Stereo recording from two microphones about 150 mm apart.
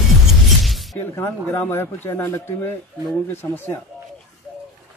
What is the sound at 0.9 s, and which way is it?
Speech, 15° left (ahead or behind).